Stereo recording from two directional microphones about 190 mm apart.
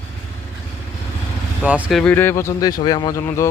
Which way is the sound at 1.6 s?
5° right (ahead or behind).